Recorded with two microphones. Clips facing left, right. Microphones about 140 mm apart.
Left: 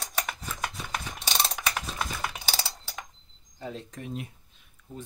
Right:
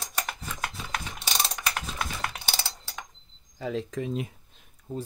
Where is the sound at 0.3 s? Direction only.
5° right (ahead or behind).